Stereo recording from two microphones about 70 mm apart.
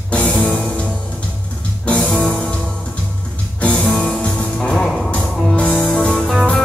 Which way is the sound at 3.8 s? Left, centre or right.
Centre.